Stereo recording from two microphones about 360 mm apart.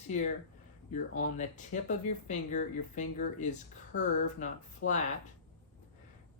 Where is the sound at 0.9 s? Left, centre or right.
Left.